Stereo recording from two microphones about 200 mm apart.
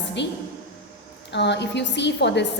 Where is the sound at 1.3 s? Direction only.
60° left (ahead or behind).